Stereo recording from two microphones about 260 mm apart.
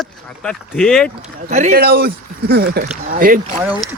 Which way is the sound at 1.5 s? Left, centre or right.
Right.